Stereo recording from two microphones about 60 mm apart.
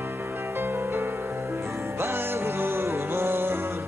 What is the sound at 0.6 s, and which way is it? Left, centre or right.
Music, right.